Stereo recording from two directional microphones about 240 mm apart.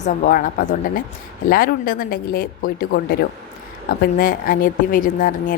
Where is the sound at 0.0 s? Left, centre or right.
Left.